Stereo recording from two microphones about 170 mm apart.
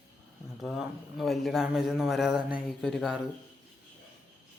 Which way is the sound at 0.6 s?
Centre (ahead or behind).